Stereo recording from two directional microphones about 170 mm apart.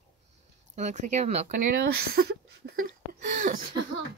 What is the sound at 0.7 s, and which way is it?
Speech, 45° right (ahead or behind).